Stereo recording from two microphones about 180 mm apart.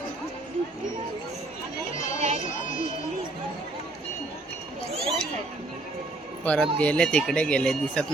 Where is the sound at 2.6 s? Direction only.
45° left (ahead or behind).